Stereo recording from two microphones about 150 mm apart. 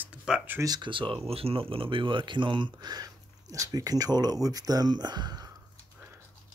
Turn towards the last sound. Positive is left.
turn(degrees=-25)  # may be behind; listen again after turning